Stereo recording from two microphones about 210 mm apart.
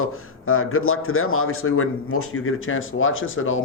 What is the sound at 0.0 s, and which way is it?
Speech, 85° left.